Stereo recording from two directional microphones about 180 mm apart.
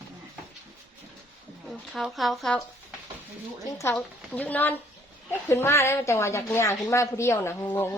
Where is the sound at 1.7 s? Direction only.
Centre (ahead or behind).